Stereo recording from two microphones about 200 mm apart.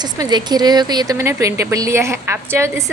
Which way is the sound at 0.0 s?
20° right (ahead or behind).